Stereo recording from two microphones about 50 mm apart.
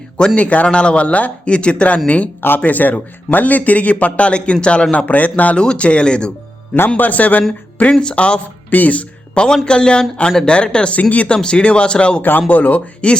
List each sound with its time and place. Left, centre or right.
0.3 s a man's voice: left
5.5 s speech: left
6.7 s a man's voice: left; by 12.2 s centre
12.5 s a man's voice: left